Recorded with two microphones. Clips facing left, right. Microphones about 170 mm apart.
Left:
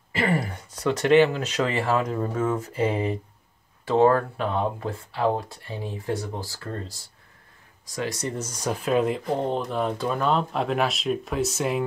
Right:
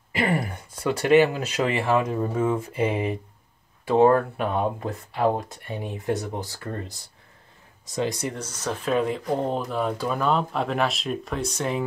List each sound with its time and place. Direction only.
0.1 s speech: 15° right (ahead or behind)
8.4 s speech: 10° left (ahead or behind)